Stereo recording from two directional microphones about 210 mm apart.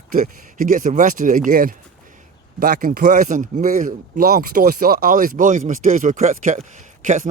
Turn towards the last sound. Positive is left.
turn(degrees=-35)  # may be behind; listen again after turning